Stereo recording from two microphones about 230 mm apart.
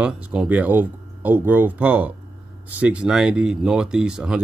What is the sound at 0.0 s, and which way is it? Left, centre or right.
Speech, centre.